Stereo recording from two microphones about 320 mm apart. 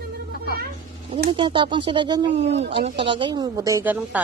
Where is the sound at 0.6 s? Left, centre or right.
Right.